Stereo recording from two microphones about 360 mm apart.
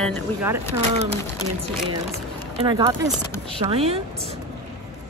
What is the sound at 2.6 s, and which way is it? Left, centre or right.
Speech, centre.